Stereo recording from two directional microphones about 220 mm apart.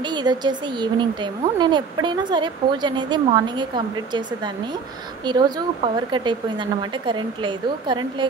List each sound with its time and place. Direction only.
0.1 s speech: 20° right (ahead or behind)
5.2 s speech: 20° right (ahead or behind)